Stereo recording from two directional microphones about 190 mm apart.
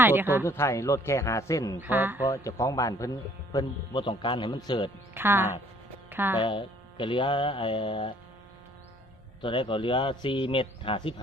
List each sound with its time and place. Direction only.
0.0 s speech: 10° right (ahead or behind)
0.4 s a man's voice: 15° left (ahead or behind)
1.8 s speech: 10° right (ahead or behind)
2.2 s a man's voice: 15° left (ahead or behind)
5.1 s speech: 10° right (ahead or behind)
6.4 s a man's voice: 25° left (ahead or behind)
9.4 s a man's voice: 25° left (ahead or behind)